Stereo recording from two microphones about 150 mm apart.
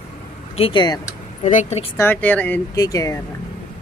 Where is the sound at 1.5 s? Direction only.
55° left (ahead or behind).